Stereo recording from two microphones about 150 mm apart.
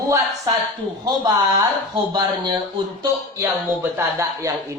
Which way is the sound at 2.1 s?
30° right (ahead or behind).